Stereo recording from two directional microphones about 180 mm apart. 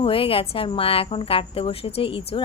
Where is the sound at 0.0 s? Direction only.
30° left (ahead or behind).